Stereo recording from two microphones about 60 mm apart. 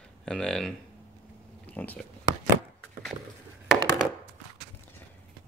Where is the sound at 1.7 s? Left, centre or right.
Left.